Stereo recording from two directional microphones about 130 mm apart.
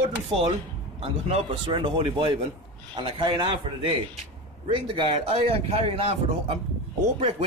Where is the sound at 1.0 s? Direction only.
45° right (ahead or behind).